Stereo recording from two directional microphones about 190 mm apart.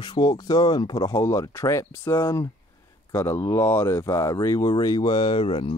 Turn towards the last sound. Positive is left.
turn(degrees=25)  # may be behind; listen again after turning